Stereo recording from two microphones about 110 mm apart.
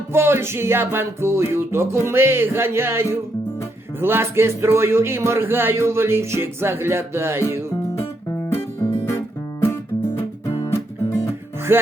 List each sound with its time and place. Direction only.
0.1 s a man's voice: 20° right (ahead or behind)
7.9 s music: 25° left (ahead or behind)
11.7 s music: 20° right (ahead or behind)